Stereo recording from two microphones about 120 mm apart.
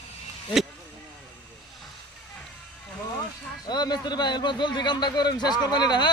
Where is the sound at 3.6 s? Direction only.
35° left (ahead or behind).